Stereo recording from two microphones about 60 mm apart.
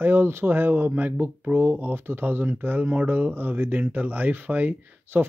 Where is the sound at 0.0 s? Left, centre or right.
Right.